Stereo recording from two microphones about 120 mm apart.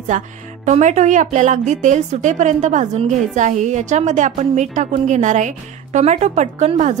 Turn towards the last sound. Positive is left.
turn(degrees=-70)  # may be behind; listen again after turning